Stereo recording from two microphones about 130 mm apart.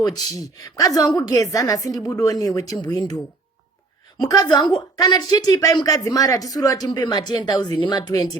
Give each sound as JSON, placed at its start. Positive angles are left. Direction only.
{"t": 0.0, "sound": "a woman's voice", "side_deg": 30}
{"t": 4.2, "sound": "a woman's voice", "side_deg": 30}